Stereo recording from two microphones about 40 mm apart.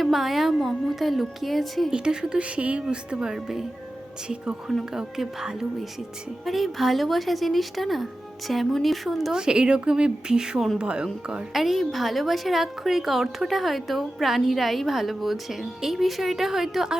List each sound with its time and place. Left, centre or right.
0.0 s a woman's voice: centre
1.9 s a woman's voice: right
2.6 s speech: right
2.9 s speech: right
4.9 s a woman's voice: centre
9.3 s a woman's voice: right
11.5 s a woman's voice: centre